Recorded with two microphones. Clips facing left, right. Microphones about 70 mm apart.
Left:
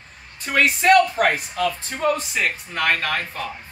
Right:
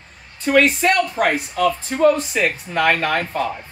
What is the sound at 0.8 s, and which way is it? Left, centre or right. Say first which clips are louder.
Speech: left 2 dB; centre.